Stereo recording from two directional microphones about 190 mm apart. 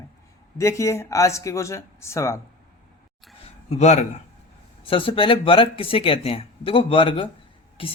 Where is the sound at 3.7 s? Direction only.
35° left (ahead or behind).